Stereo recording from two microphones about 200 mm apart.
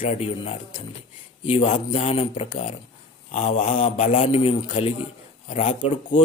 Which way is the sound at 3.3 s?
40° left (ahead or behind).